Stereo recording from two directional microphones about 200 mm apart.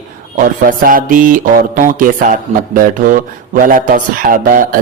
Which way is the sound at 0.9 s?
45° right (ahead or behind).